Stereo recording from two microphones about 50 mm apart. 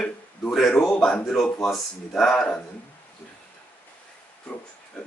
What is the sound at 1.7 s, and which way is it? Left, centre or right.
Speech, centre.